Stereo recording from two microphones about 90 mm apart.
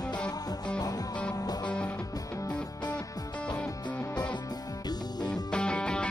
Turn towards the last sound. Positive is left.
turn(degrees=10)  # may be behind; listen again after turning